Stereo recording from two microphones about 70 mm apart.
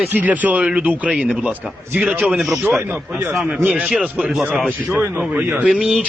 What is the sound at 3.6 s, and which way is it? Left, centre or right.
Speech, right.